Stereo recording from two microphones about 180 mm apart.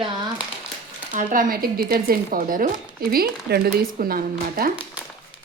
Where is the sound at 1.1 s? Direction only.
45° right (ahead or behind).